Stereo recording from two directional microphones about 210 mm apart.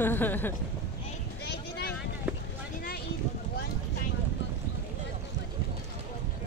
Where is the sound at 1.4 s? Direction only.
50° left (ahead or behind).